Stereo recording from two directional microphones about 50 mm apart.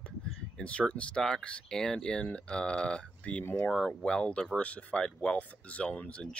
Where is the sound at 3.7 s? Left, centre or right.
Centre.